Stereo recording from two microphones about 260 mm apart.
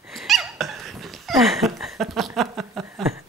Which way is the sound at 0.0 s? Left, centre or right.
Centre.